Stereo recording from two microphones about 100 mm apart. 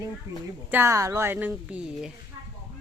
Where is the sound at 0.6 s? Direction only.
20° right (ahead or behind).